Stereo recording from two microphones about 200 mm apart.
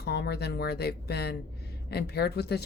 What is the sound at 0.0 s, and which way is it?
Speech, 55° left (ahead or behind).